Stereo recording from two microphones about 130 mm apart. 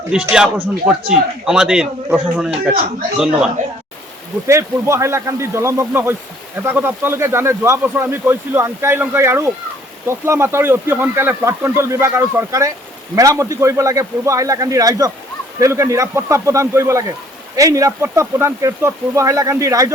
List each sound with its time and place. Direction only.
0.1 s speech: 5° right (ahead or behind)
3.6 s a man's voice: 80° right
4.4 s speech: 20° right (ahead or behind)